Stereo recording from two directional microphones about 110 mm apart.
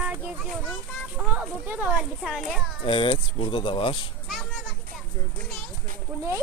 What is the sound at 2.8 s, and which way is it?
Speech, 55° left (ahead or behind).